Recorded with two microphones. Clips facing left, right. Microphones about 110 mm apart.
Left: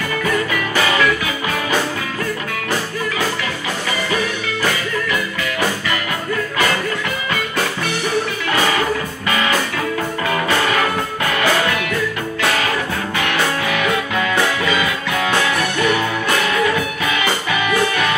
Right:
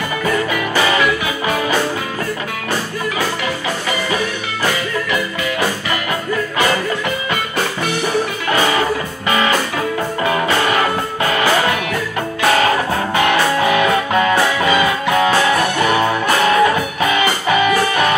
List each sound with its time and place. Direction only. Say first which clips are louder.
12.4 s music: right 6 dB; 35° right (ahead or behind)